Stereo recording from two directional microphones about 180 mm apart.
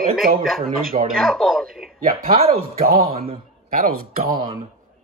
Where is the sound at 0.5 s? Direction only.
50° right (ahead or behind).